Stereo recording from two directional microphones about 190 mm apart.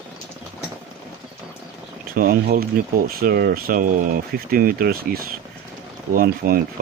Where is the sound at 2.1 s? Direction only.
50° right (ahead or behind).